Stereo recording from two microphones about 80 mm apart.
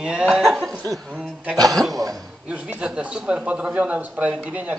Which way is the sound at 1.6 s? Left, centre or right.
Centre.